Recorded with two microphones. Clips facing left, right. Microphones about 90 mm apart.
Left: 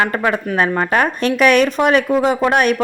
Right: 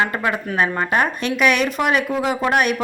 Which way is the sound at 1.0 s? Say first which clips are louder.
Left 4 dB; 40° left (ahead or behind).